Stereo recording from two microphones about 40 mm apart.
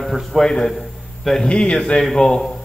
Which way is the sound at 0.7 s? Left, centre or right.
Centre.